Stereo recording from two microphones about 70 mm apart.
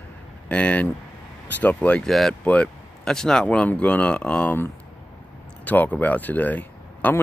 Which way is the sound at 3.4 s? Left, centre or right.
Left.